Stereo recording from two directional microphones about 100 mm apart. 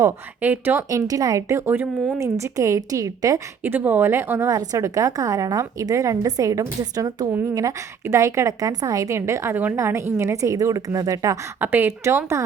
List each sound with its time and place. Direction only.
0.4 s speech: 20° right (ahead or behind)
0.9 s a woman's voice: 35° right (ahead or behind)
2.2 s a woman's voice: 30° right (ahead or behind)
3.6 s a woman's voice: 20° right (ahead or behind); by 11.3 s 35° right (ahead or behind)
11.6 s speech: 20° right (ahead or behind)